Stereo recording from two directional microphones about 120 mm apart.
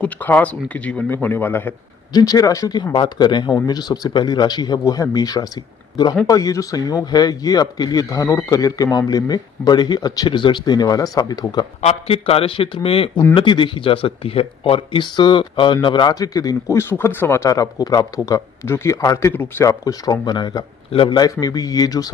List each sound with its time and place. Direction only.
0.0 s a man's voice: 15° left (ahead or behind)
2.1 s speech: 30° left (ahead or behind)
11.8 s speech: 55° left (ahead or behind); by 22.1 s 30° left (ahead or behind)